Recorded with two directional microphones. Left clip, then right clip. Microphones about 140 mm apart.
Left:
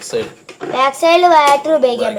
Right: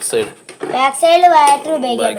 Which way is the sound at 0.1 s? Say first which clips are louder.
Right 3 dB; 70° right (ahead or behind).